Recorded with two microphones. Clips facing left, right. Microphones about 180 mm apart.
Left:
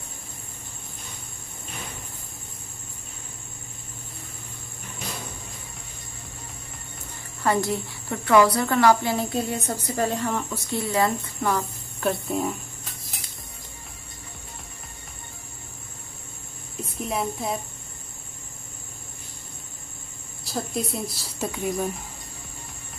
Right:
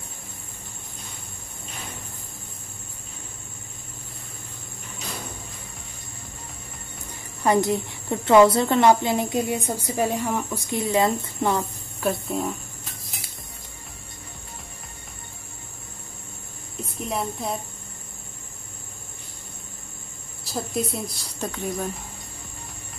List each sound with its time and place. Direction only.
7.4 s a woman's voice: 20° right (ahead or behind)
12.0 s speech: centre (ahead or behind)
17.0 s speech: centre (ahead or behind)
20.4 s speech: centre (ahead or behind)